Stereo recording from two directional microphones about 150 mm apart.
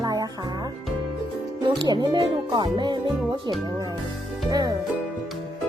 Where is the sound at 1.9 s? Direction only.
30° right (ahead or behind).